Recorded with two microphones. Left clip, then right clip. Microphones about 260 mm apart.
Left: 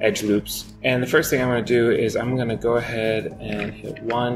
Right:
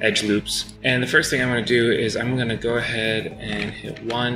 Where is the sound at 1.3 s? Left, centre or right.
Left.